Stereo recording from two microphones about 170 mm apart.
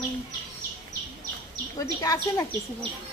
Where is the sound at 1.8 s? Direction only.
20° left (ahead or behind).